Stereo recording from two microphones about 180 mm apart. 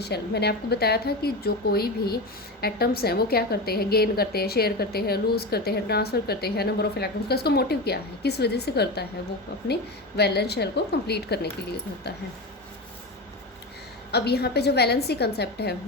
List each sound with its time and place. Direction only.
0.0 s a woman's voice: 65° left (ahead or behind)
10.2 s a woman's voice: 65° left (ahead or behind)
14.1 s a woman's voice: 65° left (ahead or behind)